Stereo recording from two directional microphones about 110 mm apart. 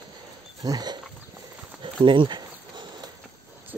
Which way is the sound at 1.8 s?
50° right (ahead or behind).